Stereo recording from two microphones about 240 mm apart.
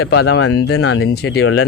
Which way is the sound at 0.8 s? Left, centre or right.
Left.